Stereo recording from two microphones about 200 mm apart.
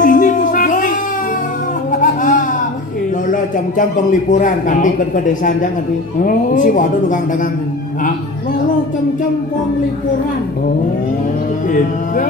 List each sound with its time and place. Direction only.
0.0 s music: 40° left (ahead or behind)
3.3 s a man's voice: 40° left (ahead or behind)
11.6 s a man's voice: 40° left (ahead or behind)